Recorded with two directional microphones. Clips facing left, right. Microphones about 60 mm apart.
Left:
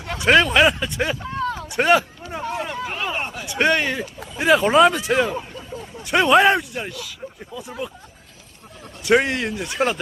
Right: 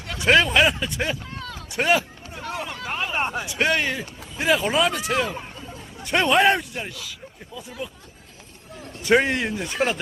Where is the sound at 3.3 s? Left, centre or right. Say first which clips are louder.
Right 4 dB; centre.